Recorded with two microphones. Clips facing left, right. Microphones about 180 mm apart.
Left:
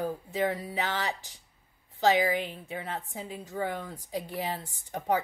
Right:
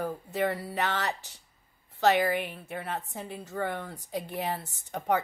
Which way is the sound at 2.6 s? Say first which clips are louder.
Right 1 dB; 60° right (ahead or behind).